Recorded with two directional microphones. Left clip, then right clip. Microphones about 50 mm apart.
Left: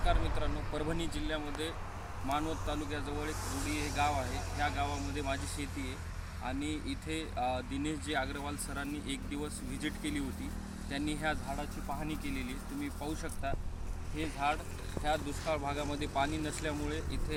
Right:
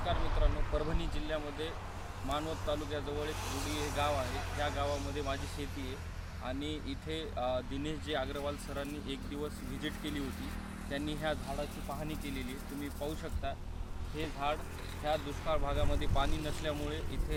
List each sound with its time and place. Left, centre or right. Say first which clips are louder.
0.0 s a sound: left 1 dB; right
2.3 s speech: even; right
3.4 s speech: even; centre
4.5 s speech: left 1 dB; right
11.4 s speech: even; centre
14.2 s speech: left 2 dB; centre